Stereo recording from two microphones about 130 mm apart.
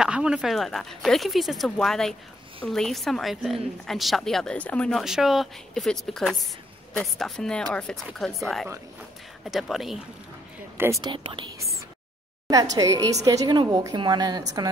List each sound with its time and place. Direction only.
0.0 s a woman's voice: 5° right (ahead or behind)
10.8 s speech: 25° right (ahead or behind)
11.1 s a woman's voice: 40° right (ahead or behind)
12.4 s a woman's voice: 30° right (ahead or behind)